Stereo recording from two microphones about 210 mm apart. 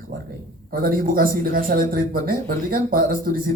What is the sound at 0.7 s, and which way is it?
A man's voice, 45° right (ahead or behind).